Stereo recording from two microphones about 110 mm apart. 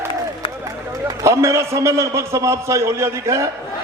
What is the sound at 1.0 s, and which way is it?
A man's voice, 30° right (ahead or behind).